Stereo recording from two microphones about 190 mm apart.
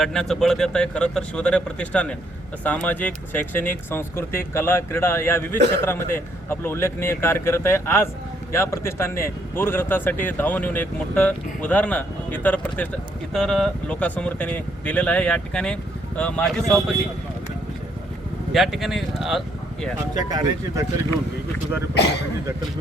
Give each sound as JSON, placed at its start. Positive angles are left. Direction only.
{"t": 0.0, "sound": "speech", "side_deg": 5}
{"t": 5.5, "sound": "a man's voice", "side_deg": -60}
{"t": 5.8, "sound": "speech", "side_deg": 15}
{"t": 18.5, "sound": "speech", "side_deg": 0}
{"t": 20.1, "sound": "speech", "side_deg": -20}